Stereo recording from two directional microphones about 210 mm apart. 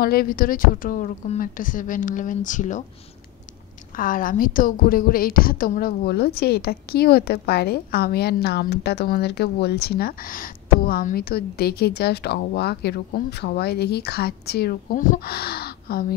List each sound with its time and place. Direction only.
0.0 s a woman's voice: 45° left (ahead or behind)
3.9 s a woman's voice: 40° left (ahead or behind)